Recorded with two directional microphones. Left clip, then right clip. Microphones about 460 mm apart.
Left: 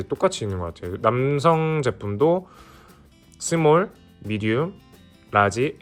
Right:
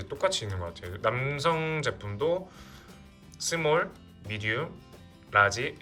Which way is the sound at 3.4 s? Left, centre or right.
Centre.